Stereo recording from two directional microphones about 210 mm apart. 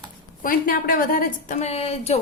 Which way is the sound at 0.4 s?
40° left (ahead or behind).